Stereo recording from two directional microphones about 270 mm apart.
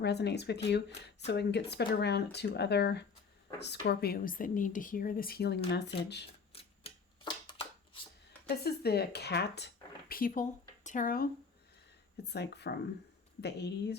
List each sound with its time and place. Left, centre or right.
0.0 s speech: left
6.5 s a sound: left
8.4 s speech: left
12.3 s speech: left